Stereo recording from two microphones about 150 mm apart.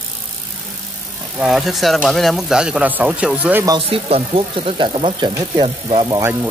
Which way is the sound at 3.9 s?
40° right (ahead or behind).